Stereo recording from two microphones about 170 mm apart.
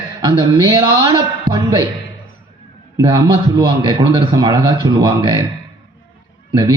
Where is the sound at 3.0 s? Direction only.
25° right (ahead or behind).